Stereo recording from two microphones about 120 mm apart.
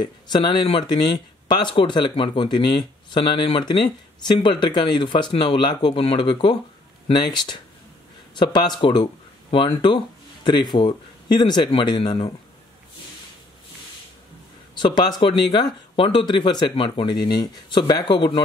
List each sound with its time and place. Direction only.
0.0 s speech: 40° left (ahead or behind)
14.8 s speech: 40° left (ahead or behind)